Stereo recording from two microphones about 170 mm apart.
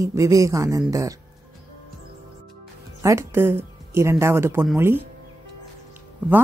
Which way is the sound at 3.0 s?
15° right (ahead or behind).